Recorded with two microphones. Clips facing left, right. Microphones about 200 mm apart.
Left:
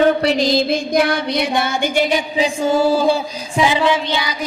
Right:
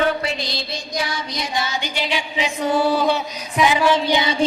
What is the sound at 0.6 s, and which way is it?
Female singing, 55° left (ahead or behind).